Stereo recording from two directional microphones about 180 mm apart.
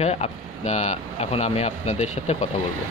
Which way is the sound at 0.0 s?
35° left (ahead or behind).